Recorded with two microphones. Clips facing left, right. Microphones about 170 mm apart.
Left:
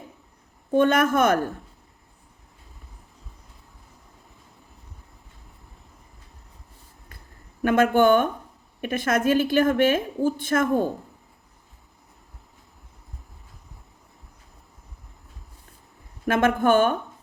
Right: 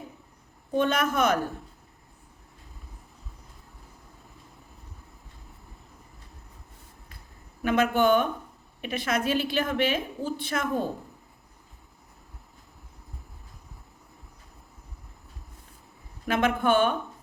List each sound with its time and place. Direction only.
0.7 s a woman's voice: 50° left (ahead or behind)
7.6 s a woman's voice: 50° left (ahead or behind)
16.2 s a woman's voice: 50° left (ahead or behind)